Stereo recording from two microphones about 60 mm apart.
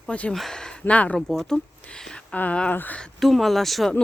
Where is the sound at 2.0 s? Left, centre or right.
Centre.